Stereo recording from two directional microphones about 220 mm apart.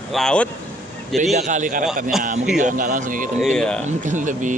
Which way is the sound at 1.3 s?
35° right (ahead or behind).